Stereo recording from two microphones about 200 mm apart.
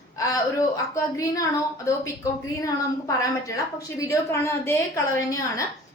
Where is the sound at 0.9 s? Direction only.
15° left (ahead or behind).